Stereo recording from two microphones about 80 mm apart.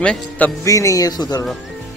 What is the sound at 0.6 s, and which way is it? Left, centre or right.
Speech, left.